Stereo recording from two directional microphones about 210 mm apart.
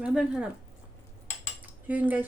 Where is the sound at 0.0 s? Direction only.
5° right (ahead or behind).